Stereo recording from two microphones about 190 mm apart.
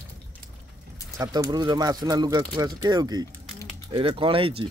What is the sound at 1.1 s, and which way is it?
Speech, 15° right (ahead or behind).